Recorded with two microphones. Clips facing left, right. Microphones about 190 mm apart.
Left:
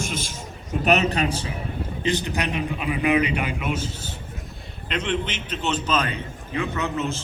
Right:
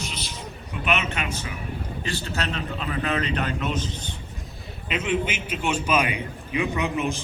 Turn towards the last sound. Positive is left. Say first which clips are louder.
# right 1 dB
turn(degrees=-15)  # may be behind; listen again after turning